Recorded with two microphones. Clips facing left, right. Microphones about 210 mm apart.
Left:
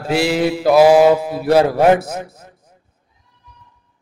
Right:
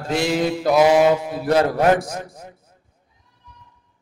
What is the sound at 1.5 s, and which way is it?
Speech, 10° left (ahead or behind).